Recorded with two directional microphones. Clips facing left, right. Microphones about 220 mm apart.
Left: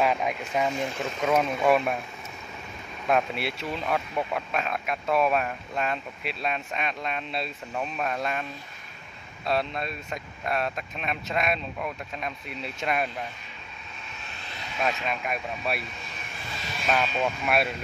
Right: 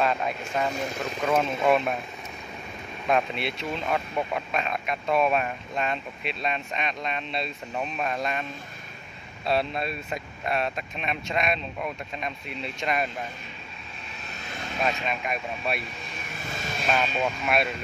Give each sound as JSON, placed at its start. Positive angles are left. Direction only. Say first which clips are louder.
{"t": 0.0, "sound": "speech", "louder": "left 1 dB", "side_deg": 10}
{"t": 3.1, "sound": "speech", "louder": "even", "side_deg": 5}
{"t": 9.5, "sound": "speech", "louder": "right 2 dB", "side_deg": -5}
{"t": 14.4, "sound": "vehicle", "louder": "right 5 dB", "side_deg": -50}
{"t": 14.8, "sound": "speech", "louder": "even", "side_deg": 0}
{"t": 16.9, "sound": "speech", "louder": "left 1 dB", "side_deg": 5}